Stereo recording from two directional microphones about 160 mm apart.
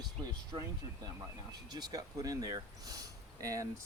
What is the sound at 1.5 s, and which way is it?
Speech, 25° right (ahead or behind).